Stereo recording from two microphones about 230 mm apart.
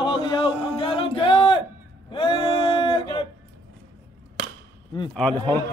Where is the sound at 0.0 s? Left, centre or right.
Left.